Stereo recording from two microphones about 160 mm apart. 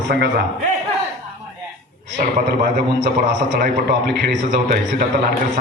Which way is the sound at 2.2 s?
80° right.